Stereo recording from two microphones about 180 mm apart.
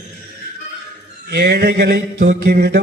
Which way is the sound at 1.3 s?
60° right (ahead or behind).